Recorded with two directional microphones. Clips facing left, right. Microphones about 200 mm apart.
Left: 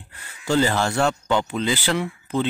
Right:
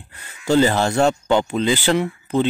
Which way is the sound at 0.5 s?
20° right (ahead or behind).